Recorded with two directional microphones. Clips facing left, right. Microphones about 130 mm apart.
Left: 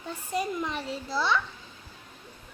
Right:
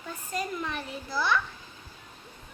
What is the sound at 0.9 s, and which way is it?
Speech, 25° left (ahead or behind).